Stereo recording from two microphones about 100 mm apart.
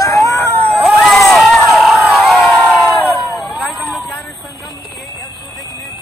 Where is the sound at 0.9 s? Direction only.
Centre (ahead or behind).